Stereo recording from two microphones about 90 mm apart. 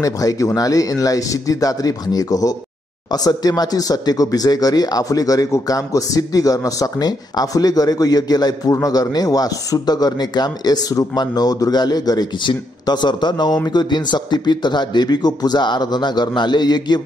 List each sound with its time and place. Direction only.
0.0 s speech: 40° left (ahead or behind)